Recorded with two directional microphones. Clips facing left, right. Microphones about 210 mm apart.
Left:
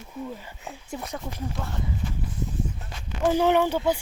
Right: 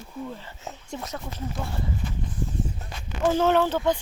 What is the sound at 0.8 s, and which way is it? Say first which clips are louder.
Speech: left 1 dB; 10° left (ahead or behind).